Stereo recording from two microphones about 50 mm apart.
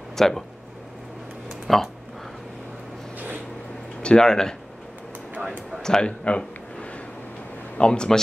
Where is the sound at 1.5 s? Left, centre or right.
Centre.